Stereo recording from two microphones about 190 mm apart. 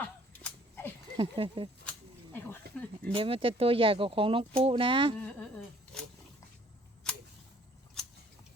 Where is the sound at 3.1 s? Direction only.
30° right (ahead or behind).